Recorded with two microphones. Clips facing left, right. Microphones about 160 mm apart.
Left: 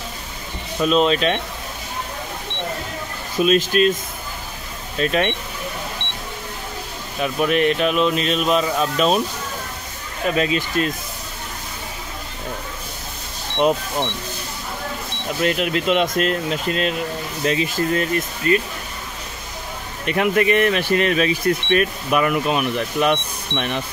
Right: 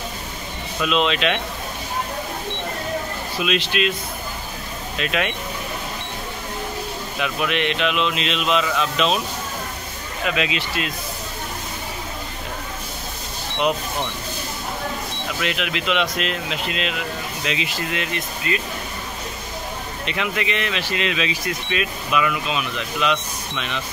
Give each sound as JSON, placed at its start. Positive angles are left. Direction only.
{"t": 0.7, "sound": "speech", "side_deg": 40}
{"t": 3.3, "sound": "speech", "side_deg": 45}
{"t": 4.9, "sound": "speech", "side_deg": 40}
{"t": 7.2, "sound": "speech", "side_deg": 40}
{"t": 10.2, "sound": "speech", "side_deg": 40}
{"t": 13.6, "sound": "speech", "side_deg": 35}
{"t": 15.4, "sound": "speech", "side_deg": 45}
{"t": 20.1, "sound": "speech", "side_deg": 45}